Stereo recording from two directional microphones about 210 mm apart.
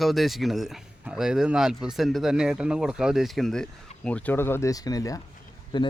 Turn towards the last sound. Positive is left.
turn(degrees=20)  # may be behind; listen again after turning